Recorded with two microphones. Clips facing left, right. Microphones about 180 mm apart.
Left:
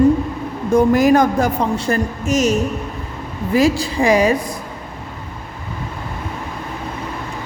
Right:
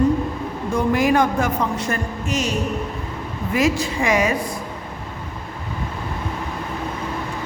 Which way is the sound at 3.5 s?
35° left (ahead or behind).